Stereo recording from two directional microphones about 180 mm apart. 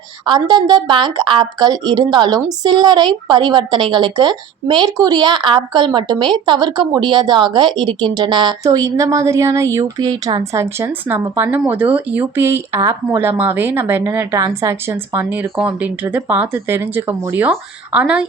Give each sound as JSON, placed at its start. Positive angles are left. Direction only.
{"t": 0.3, "sound": "a woman's voice", "side_deg": -25}